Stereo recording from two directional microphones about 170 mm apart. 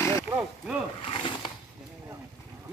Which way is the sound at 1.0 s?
30° left (ahead or behind).